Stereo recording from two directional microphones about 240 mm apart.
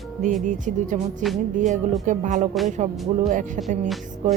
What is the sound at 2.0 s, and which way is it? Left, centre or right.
Speech, right.